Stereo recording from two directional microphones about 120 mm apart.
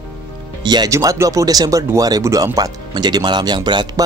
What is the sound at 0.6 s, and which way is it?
Speech, 35° right (ahead or behind).